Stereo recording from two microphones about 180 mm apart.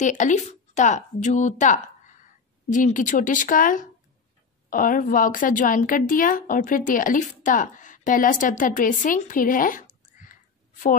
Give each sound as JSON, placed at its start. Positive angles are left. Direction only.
{"t": 0.0, "sound": "a woman's voice", "side_deg": 45}